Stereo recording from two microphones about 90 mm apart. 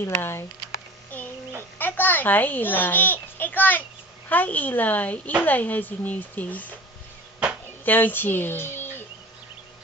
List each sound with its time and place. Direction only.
0.0 s a woman's voice: 25° left (ahead or behind)
1.1 s child singing: 20° left (ahead or behind)
1.8 s a child's voice: 20° left (ahead or behind)
7.8 s a woman's voice: 20° left (ahead or behind)